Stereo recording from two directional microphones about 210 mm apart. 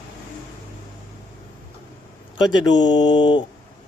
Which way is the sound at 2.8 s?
20° left (ahead or behind).